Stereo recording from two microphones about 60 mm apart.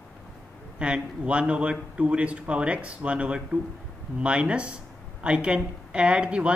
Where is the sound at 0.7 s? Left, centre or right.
Centre.